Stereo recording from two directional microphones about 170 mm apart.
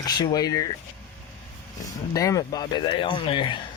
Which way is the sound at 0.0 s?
20° left (ahead or behind).